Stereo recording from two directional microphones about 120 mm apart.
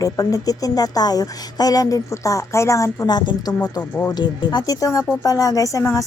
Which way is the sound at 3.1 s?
35° left (ahead or behind).